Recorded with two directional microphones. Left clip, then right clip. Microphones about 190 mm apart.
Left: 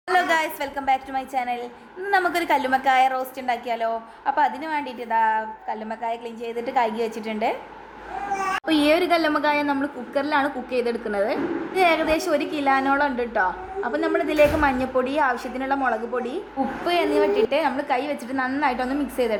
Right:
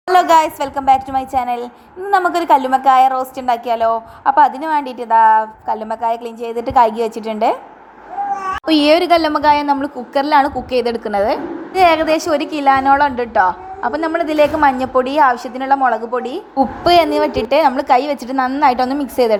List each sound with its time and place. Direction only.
0.1 s a woman's voice: 30° right (ahead or behind)
8.6 s a woman's voice: 30° right (ahead or behind)
16.6 s a woman's voice: 35° right (ahead or behind)